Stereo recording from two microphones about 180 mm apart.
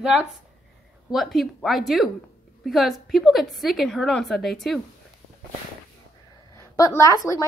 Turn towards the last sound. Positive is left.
turn(degrees=15)  # may be behind; listen again after turning